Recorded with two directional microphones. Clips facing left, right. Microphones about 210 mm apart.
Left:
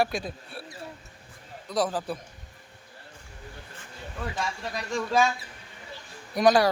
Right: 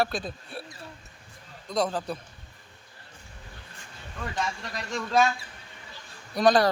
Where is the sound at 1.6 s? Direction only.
5° left (ahead or behind).